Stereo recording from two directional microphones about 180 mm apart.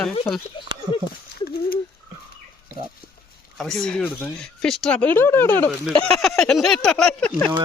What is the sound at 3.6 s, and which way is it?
Speech, 5° left (ahead or behind).